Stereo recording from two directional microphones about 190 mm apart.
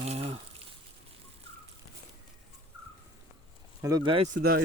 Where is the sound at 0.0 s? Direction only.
30° right (ahead or behind).